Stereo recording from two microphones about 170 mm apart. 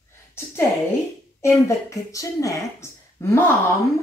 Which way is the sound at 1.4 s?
20° left (ahead or behind).